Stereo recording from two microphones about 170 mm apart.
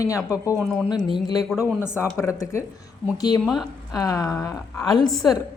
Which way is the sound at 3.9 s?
20° left (ahead or behind).